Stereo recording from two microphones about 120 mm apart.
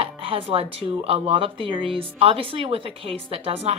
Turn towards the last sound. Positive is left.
turn(degrees=-60)  # may be behind; listen again after turning